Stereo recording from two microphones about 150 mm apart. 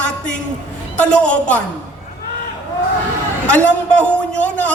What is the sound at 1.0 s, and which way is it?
Speech, 10° left (ahead or behind).